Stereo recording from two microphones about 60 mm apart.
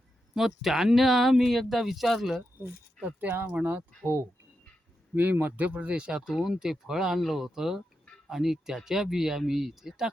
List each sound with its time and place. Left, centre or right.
0.3 s speech: centre
3.2 s speech: right
5.1 s speech: right; by 10.1 s centre